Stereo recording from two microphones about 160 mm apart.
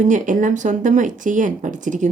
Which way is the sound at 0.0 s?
55° right (ahead or behind).